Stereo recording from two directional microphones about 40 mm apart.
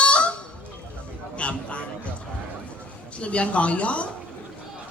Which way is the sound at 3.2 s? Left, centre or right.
Left.